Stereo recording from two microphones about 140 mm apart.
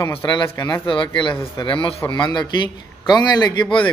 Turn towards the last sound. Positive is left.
turn(degrees=30)  # may be behind; listen again after turning